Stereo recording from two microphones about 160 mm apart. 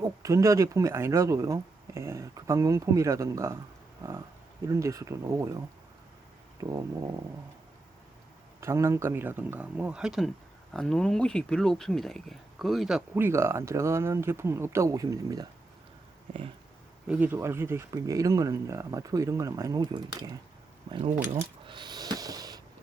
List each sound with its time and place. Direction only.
0.2 s speech: 20° right (ahead or behind)
4.6 s speech: 20° right (ahead or behind)
8.6 s speech: 20° right (ahead or behind); by 13.0 s centre (ahead or behind)
13.1 s speech: 15° right (ahead or behind)
17.1 s speech: 10° right (ahead or behind); by 21.0 s 25° right (ahead or behind)
21.7 s snort: 25° right (ahead or behind)